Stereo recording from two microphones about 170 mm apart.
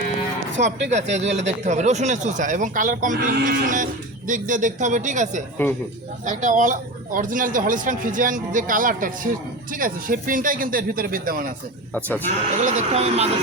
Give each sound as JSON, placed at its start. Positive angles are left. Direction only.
{"t": 0.6, "sound": "speech", "side_deg": -40}
{"t": 5.6, "sound": "a man's voice", "side_deg": 10}
{"t": 6.2, "sound": "speech", "side_deg": -45}